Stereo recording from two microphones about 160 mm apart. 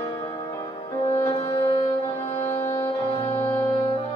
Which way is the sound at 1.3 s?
40° left (ahead or behind).